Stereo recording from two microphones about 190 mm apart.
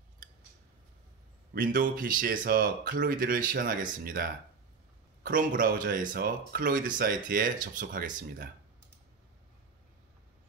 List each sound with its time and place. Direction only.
1.5 s speech: 45° right (ahead or behind)